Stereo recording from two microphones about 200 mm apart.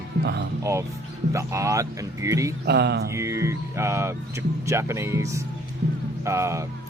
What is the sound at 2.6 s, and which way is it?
Mantra, 55° right (ahead or behind).